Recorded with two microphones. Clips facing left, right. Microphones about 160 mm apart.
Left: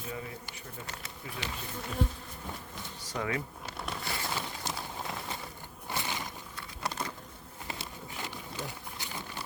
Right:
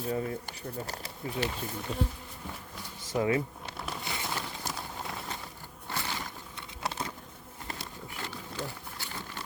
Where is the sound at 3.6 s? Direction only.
Centre (ahead or behind).